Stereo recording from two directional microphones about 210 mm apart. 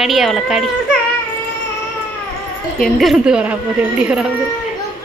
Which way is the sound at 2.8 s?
Centre (ahead or behind).